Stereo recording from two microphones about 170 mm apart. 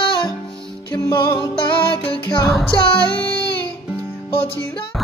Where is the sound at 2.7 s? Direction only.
25° left (ahead or behind).